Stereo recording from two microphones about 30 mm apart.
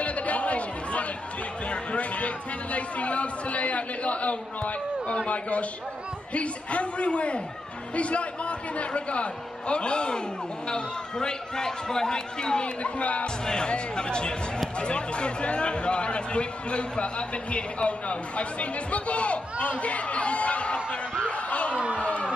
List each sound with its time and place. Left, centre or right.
0.0 s chatter: left
1.7 s speech: left
21.3 s a sound: left